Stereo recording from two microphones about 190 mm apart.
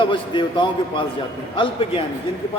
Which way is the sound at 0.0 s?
25° left (ahead or behind).